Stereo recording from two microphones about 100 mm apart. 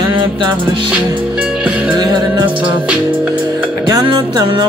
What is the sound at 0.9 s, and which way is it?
Music, 10° right (ahead or behind).